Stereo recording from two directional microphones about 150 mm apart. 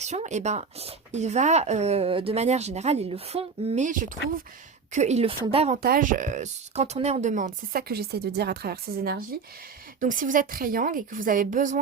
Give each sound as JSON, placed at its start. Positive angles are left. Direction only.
{"t": 0.0, "sound": "speech", "side_deg": -50}
{"t": 5.8, "sound": "speech", "side_deg": -75}
{"t": 10.0, "sound": "a woman's voice", "side_deg": -60}